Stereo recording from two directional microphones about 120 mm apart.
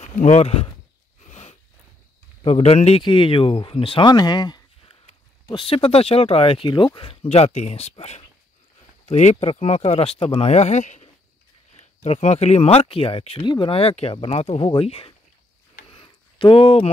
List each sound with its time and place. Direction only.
0.0 s speech: 70° left (ahead or behind)
1.3 s a sound: 65° left (ahead or behind)
2.4 s speech: 55° left (ahead or behind)
3.0 s speech: 45° left (ahead or behind); by 11.1 s 80° left
11.7 s speech: 60° left (ahead or behind)
13.4 s speech: 40° left (ahead or behind)
15.9 s a sound: 45° left (ahead or behind)